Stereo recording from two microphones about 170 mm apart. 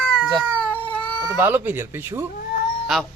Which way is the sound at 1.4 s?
10° right (ahead or behind).